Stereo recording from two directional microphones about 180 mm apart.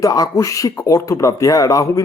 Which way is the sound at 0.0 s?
20° left (ahead or behind).